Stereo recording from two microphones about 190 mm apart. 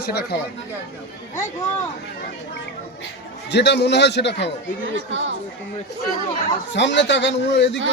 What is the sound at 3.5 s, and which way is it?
Speech, 60° left (ahead or behind).